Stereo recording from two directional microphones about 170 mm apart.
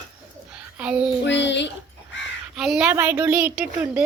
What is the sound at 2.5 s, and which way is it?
A woman's voice, 5° right (ahead or behind).